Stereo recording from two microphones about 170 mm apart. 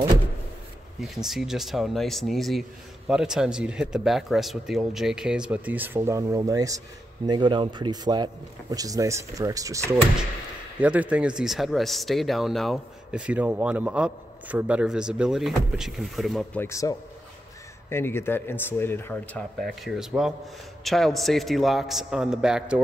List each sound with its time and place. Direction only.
1.0 s a man's voice: centre (ahead or behind); by 9.9 s 20° right (ahead or behind)
10.8 s speech: 10° right (ahead or behind)
16.6 s a man's voice: 20° left (ahead or behind)
19.6 s speech: centre (ahead or behind)